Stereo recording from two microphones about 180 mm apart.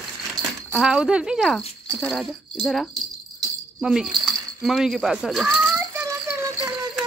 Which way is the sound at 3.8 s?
5° right (ahead or behind).